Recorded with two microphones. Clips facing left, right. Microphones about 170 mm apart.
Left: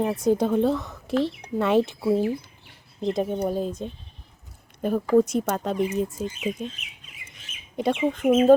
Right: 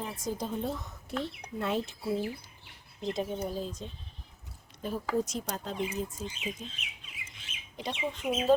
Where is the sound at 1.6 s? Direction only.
80° left.